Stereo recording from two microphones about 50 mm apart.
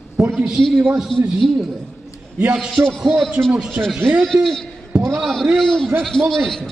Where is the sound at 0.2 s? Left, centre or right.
Centre.